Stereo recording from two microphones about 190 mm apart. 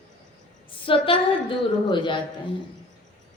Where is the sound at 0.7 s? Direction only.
25° left (ahead or behind).